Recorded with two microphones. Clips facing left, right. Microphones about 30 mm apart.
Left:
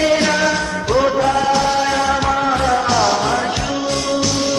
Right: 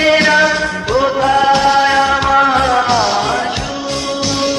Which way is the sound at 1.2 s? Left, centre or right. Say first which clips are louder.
Right 4 dB; right.